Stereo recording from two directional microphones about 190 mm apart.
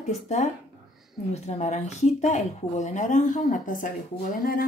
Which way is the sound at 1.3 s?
35° left (ahead or behind).